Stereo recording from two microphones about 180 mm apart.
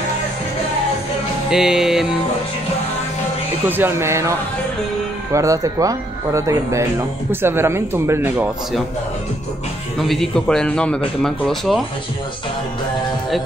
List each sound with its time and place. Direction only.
1.5 s a man's voice: 5° right (ahead or behind)
3.6 s speech: 10° right (ahead or behind)
9.9 s a man's voice: centre (ahead or behind)